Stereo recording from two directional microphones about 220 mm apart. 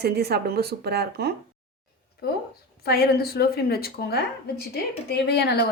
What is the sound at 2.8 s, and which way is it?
Speech, 45° left (ahead or behind).